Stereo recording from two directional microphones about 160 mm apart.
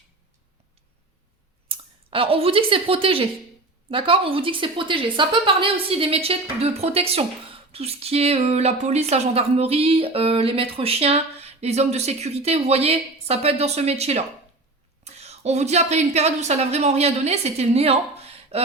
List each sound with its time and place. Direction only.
1.6 s a woman's voice: 35° right (ahead or behind)